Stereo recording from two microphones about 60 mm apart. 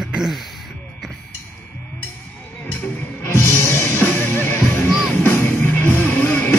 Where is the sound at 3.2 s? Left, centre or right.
Left.